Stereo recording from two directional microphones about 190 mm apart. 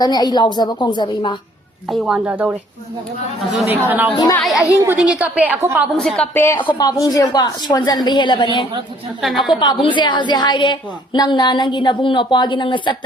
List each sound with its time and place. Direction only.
0.0 s a woman's voice: 20° left (ahead or behind)
1.9 s speech: 5° right (ahead or behind)
3.7 s a woman's voice: 10° right (ahead or behind)
6.0 s a woman's voice: 5° left (ahead or behind); by 8.4 s 25° left (ahead or behind)
9.2 s speech: centre (ahead or behind)
9.6 s a woman's voice: 25° left (ahead or behind)